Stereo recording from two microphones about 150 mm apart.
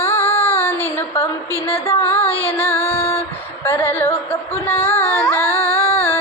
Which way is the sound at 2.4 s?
15° left (ahead or behind).